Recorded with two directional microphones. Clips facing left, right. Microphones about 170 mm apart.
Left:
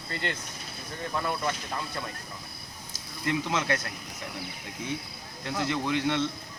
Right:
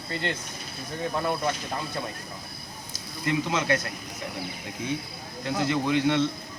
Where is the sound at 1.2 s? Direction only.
25° right (ahead or behind).